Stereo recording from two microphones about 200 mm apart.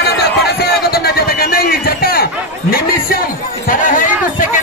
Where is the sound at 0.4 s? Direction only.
55° left (ahead or behind).